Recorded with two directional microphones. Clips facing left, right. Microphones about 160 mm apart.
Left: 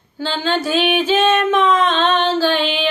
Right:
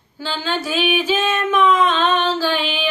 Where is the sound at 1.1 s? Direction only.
25° left (ahead or behind).